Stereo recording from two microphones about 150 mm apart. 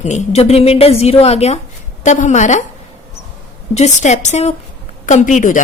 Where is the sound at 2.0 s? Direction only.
55° left (ahead or behind).